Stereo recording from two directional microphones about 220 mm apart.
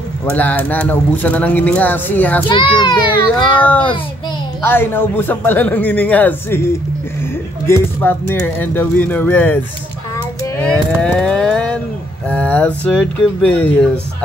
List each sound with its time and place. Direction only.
0.3 s speech: 5° left (ahead or behind)
2.4 s a child's voice: 20° left (ahead or behind)
3.6 s speech: 5° left (ahead or behind)
11.0 s a sound: 5° left (ahead or behind)
12.3 s speech: 5° left (ahead or behind)